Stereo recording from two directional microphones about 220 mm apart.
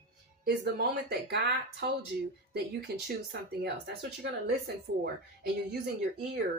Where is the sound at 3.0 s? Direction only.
50° right (ahead or behind).